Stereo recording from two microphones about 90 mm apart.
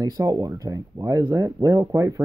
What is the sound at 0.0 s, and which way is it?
Speech, 40° right (ahead or behind).